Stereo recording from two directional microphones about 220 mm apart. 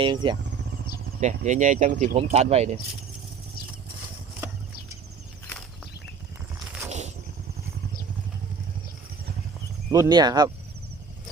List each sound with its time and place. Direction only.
0.0 s speech: 20° right (ahead or behind)
1.2 s speech: 35° right (ahead or behind)
9.9 s speech: 15° right (ahead or behind)